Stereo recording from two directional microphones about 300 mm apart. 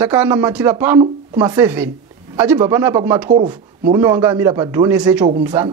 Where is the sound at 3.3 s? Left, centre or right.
Right.